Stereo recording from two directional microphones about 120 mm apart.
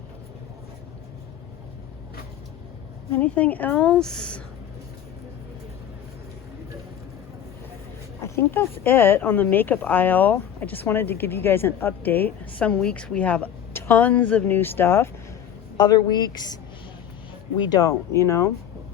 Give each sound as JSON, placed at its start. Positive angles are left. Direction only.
{"t": 3.2, "sound": "speech", "side_deg": 15}
{"t": 8.2, "sound": "speech", "side_deg": 20}
{"t": 15.8, "sound": "a woman's voice", "side_deg": 35}
{"t": 17.7, "sound": "speech", "side_deg": 30}